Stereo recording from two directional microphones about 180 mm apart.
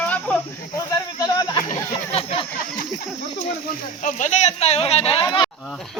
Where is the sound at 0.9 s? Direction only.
20° left (ahead or behind).